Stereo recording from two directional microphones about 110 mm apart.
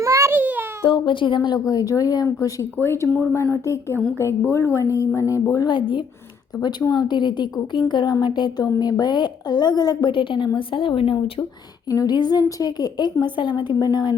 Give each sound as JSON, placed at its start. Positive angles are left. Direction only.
{"t": 0.0, "sound": "a sound", "side_deg": -25}
{"t": 0.9, "sound": "a woman's voice", "side_deg": 50}
{"t": 6.6, "sound": "a woman's voice", "side_deg": 40}
{"t": 11.9, "sound": "a woman's voice", "side_deg": 35}